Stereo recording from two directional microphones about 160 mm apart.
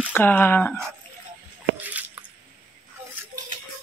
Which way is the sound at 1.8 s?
10° right (ahead or behind).